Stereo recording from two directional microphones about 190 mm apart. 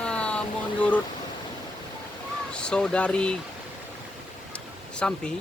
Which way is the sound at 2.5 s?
5° left (ahead or behind).